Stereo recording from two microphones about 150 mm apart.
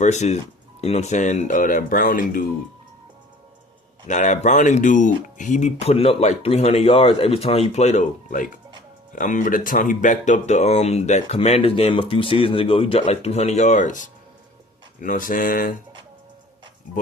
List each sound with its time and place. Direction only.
0.0 s speech: 50° left (ahead or behind); by 2.5 s 65° left (ahead or behind)
4.1 s speech: 55° left (ahead or behind)